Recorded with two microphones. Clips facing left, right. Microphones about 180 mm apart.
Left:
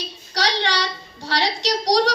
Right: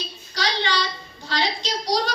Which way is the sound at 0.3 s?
75° left (ahead or behind).